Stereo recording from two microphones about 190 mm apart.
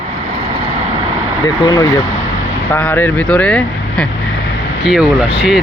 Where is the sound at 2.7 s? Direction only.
10° left (ahead or behind).